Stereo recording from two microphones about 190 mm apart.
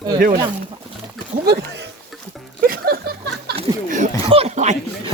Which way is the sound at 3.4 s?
50° right (ahead or behind).